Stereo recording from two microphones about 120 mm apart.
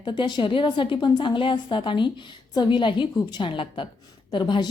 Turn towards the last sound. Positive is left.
turn(degrees=40)  # may be behind; listen again after turning